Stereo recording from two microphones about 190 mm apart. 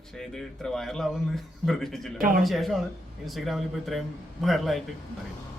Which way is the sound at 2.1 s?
50° right (ahead or behind).